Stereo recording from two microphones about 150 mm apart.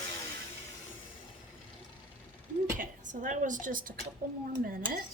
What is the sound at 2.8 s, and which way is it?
A woman's voice, 60° right (ahead or behind).